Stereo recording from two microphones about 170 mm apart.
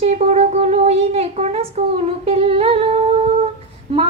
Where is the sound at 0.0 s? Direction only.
35° right (ahead or behind).